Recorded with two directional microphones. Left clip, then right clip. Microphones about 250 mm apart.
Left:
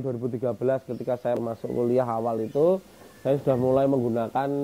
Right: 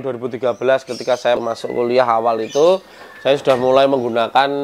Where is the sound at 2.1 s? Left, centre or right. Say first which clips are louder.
Right 11 dB; centre.